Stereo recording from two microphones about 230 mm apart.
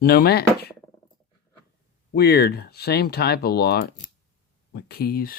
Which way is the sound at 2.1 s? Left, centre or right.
Left.